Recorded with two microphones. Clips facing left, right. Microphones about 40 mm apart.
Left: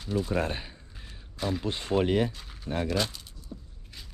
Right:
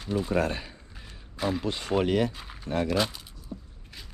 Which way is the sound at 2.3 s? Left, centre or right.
Centre.